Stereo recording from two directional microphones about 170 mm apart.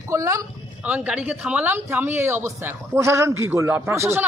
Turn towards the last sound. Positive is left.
turn(degrees=-15)  # may be behind; listen again after turning